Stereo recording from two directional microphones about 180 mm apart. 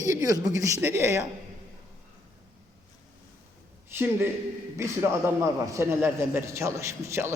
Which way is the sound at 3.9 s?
10° right (ahead or behind).